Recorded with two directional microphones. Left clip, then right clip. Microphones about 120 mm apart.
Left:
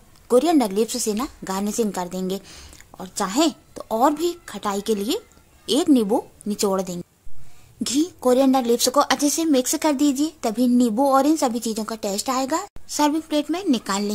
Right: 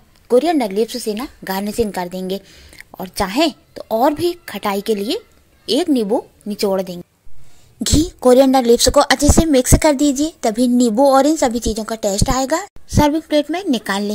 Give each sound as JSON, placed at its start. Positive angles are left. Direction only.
{"t": 0.3, "sound": "a woman's voice", "side_deg": 5}
{"t": 2.4, "sound": "speech", "side_deg": 30}
{"t": 2.9, "sound": "a woman's voice", "side_deg": -10}
{"t": 7.8, "sound": "a woman's voice", "side_deg": -20}